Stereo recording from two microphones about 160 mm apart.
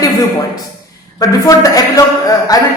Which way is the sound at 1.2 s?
20° left (ahead or behind).